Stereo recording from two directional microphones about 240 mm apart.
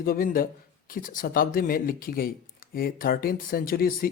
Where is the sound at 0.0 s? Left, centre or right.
Left.